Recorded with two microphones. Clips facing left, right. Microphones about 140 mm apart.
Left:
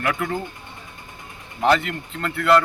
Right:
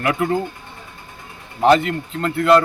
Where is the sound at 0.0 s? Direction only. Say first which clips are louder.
Right 4 dB; 20° right (ahead or behind).